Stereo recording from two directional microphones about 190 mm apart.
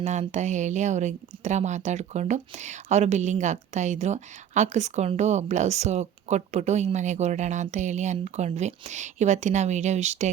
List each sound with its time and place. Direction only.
0.0 s speech: 40° right (ahead or behind)